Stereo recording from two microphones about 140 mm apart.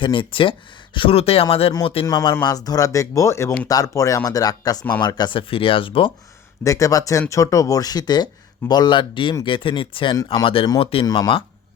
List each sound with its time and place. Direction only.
0.0 s speech: 35° left (ahead or behind)
2.0 s speech: 30° left (ahead or behind)
6.7 s speech: 25° left (ahead or behind); by 11.0 s 40° left (ahead or behind)
11.0 s speech: 25° left (ahead or behind)